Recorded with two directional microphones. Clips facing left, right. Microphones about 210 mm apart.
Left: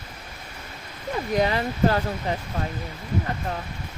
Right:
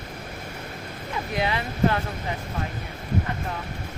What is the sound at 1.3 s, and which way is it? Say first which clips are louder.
Speech: left 5 dB; 40° left (ahead or behind).